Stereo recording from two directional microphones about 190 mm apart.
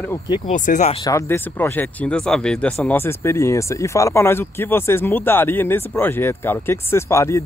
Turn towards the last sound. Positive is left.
turn(degrees=15)  # may be behind; listen again after turning